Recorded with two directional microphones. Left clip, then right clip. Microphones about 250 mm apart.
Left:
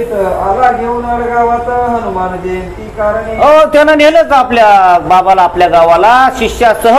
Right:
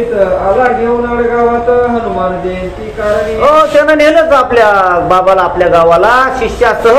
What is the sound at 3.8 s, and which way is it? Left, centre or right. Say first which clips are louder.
A man's voice: left 1 dB; left.